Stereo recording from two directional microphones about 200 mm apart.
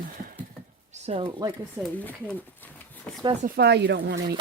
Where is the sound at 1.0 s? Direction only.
25° right (ahead or behind).